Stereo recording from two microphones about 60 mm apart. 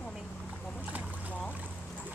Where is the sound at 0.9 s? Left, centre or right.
Right.